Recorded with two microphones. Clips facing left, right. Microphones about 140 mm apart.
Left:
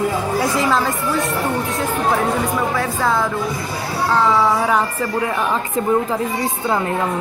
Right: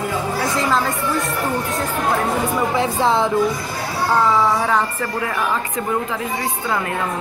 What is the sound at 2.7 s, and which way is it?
Speech, 25° right (ahead or behind).